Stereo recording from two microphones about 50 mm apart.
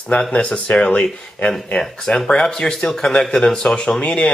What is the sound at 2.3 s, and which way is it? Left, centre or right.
Speech, centre.